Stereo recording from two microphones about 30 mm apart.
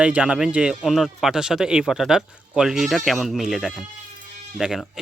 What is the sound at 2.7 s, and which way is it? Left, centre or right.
Speech, centre.